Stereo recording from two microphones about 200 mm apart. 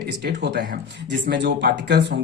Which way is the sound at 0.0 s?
55° right (ahead or behind).